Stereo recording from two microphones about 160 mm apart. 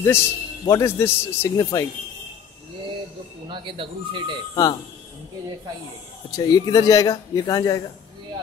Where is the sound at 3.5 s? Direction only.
30° right (ahead or behind).